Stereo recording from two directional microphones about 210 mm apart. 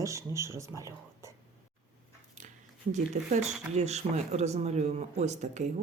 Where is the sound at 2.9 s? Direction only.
35° right (ahead or behind).